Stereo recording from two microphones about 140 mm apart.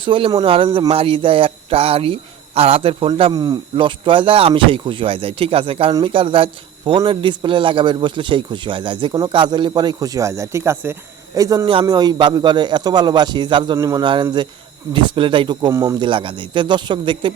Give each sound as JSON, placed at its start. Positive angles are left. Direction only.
{"t": 0.0, "sound": "a man's voice", "side_deg": -35}
{"t": 3.3, "sound": "a man's voice", "side_deg": -30}
{"t": 11.6, "sound": "a man's voice", "side_deg": -40}
{"t": 15.7, "sound": "a man's voice", "side_deg": -20}
{"t": 16.0, "sound": "a man's voice", "side_deg": -35}